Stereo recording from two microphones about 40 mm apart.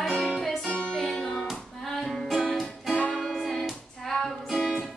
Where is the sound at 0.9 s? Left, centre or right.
Centre.